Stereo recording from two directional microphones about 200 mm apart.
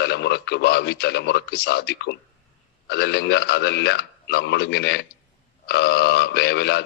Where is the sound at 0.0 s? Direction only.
55° left (ahead or behind).